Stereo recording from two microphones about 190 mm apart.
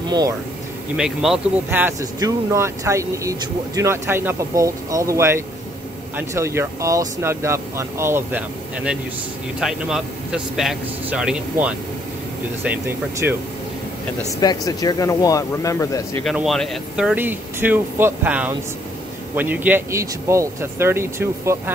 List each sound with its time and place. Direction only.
0.9 s speech: 5° right (ahead or behind)
14.4 s speech: 20° left (ahead or behind)
16.3 s speech: centre (ahead or behind)